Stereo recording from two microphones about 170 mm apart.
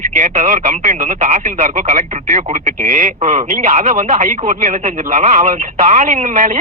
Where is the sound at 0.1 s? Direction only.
45° right (ahead or behind).